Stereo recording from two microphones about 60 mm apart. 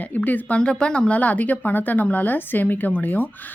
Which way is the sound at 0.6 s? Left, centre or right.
Centre.